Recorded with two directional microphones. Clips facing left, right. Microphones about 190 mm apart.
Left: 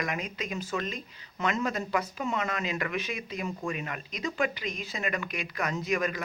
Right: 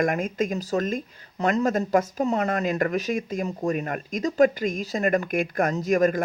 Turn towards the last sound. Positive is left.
turn(degrees=-45)  # may be behind; listen again after turning